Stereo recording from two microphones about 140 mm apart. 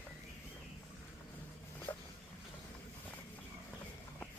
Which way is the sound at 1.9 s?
15° left (ahead or behind).